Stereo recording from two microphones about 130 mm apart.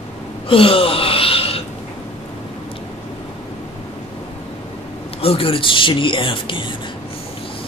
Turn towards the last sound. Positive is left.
turn(degrees=40)  # may be behind; listen again after turning